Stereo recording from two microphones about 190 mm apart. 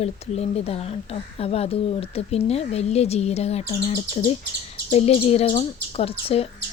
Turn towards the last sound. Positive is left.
turn(degrees=30)  # may be behind; listen again after turning